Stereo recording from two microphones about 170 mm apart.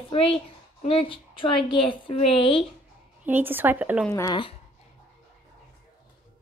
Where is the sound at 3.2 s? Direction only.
10° right (ahead or behind).